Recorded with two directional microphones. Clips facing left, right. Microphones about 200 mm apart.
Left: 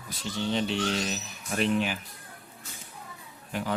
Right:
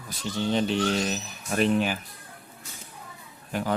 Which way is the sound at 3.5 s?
45° right (ahead or behind).